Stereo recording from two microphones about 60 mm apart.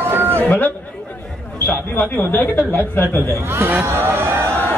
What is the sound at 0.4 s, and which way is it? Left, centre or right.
A man's voice, left.